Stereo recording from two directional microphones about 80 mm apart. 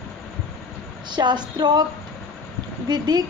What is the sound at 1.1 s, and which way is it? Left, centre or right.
Speech, right.